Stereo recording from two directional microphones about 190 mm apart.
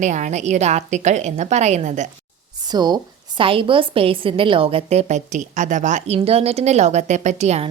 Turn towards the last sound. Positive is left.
turn(degrees=-35)  # may be behind; listen again after turning